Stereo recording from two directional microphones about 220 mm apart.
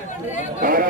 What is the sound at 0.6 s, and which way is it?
Chatter, 40° right (ahead or behind).